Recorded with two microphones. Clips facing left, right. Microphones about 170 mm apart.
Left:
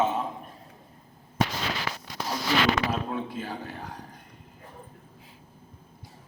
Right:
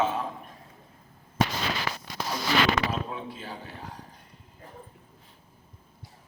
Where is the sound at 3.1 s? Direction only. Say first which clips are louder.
Left 5 dB; 50° left (ahead or behind).